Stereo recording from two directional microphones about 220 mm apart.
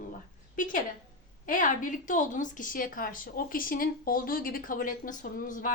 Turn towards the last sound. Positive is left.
turn(degrees=40)  # may be behind; listen again after turning